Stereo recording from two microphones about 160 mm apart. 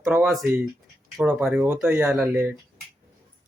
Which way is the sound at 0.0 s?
5° right (ahead or behind).